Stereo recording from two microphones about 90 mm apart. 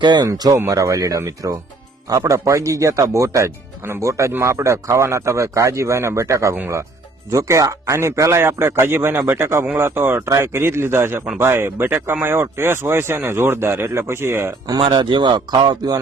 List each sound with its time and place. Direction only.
0.0 s speech: 55° right (ahead or behind)
0.5 s speech: 35° right (ahead or behind)
14.8 s speech: 65° right (ahead or behind)